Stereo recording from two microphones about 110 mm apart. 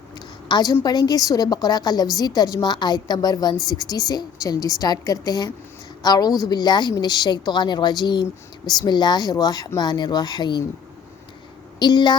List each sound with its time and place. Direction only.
0.4 s a woman's voice: 40° left (ahead or behind)
11.8 s speech: 45° left (ahead or behind)